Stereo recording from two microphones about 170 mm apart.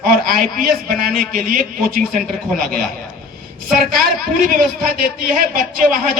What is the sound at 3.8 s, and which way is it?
A woman's voice, 55° right (ahead or behind).